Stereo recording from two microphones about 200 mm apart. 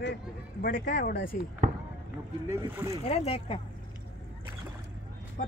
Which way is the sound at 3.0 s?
30° left (ahead or behind).